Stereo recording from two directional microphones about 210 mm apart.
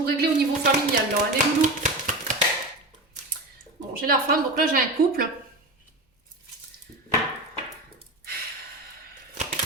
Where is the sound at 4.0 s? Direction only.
45° right (ahead or behind).